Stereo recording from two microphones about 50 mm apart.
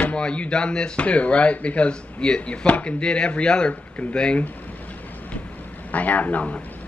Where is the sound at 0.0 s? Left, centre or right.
Left.